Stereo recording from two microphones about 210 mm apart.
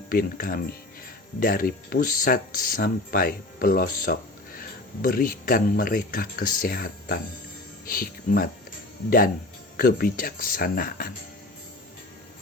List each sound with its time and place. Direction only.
0.1 s speech: 45° left (ahead or behind)